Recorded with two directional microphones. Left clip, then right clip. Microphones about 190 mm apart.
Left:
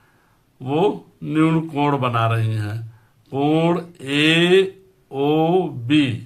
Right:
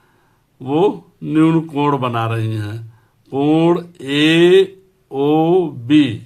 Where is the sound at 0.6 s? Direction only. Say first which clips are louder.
Right 4 dB; 45° right (ahead or behind).